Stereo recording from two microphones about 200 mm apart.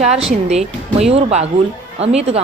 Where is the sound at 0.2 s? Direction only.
30° right (ahead or behind).